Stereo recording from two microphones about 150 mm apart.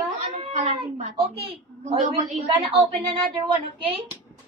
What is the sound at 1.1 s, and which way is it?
Speech, 35° right (ahead or behind).